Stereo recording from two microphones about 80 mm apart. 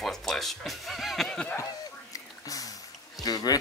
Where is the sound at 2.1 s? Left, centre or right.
Left.